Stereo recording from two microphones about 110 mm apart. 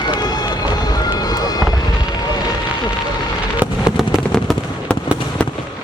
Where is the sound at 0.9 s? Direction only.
40° left (ahead or behind).